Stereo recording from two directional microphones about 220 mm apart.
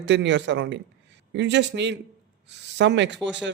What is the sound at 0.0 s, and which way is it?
Speech, 55° right (ahead or behind).